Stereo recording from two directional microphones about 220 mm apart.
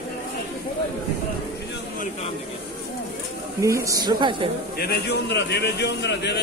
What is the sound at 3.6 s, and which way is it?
Speech, 15° right (ahead or behind).